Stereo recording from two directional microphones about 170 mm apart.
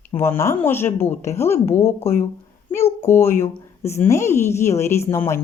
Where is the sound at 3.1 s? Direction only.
15° left (ahead or behind).